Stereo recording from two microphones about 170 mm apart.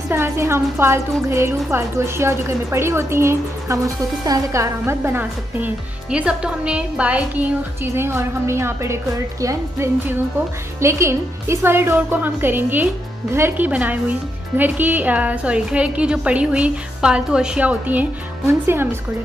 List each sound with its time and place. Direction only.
0.1 s a woman's voice: 15° right (ahead or behind)